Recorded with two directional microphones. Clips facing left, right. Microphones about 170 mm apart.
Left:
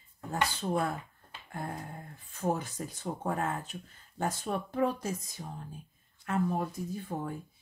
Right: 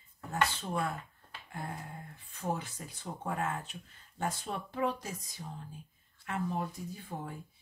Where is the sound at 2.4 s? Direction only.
45° left (ahead or behind).